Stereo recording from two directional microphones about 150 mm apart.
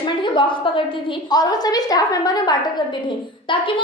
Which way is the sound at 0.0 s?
35° left (ahead or behind).